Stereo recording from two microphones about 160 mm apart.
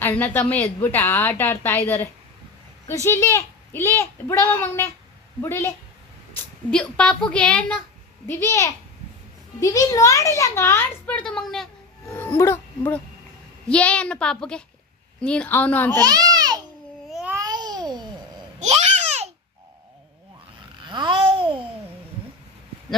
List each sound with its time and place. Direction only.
0.0 s a child's voice: 10° left (ahead or behind)
3.1 s a child's voice: 15° left (ahead or behind)
12.4 s a child's voice: 15° left (ahead or behind)
16.0 s a child's voice: 25° right (ahead or behind)
17.1 s babbling: 5° right (ahead or behind)
17.3 s babbling: 25° right (ahead or behind)
18.6 s babbling: 45° right (ahead or behind)
20.8 s babbling: 30° right (ahead or behind)